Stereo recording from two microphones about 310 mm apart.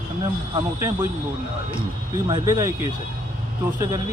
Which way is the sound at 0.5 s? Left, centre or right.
Centre.